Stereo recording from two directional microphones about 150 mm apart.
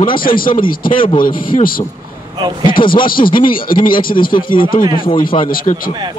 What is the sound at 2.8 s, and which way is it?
Speech, 35° left (ahead or behind).